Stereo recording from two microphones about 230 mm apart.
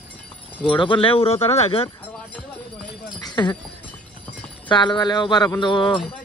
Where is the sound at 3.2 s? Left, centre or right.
Centre.